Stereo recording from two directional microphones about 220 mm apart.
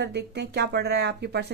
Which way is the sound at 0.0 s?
50° right (ahead or behind).